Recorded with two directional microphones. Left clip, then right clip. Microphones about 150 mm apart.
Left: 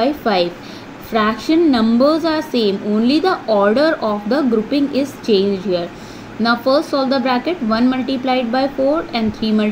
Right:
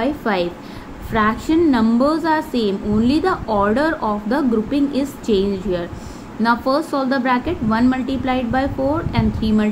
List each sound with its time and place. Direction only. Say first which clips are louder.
0.0 s a woman's voice: left 4 dB; 20° left (ahead or behind)